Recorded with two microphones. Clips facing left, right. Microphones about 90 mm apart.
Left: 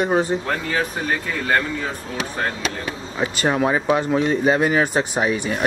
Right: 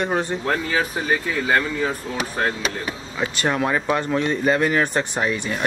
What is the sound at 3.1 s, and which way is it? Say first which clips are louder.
Speech: left 2 dB; 10° left (ahead or behind).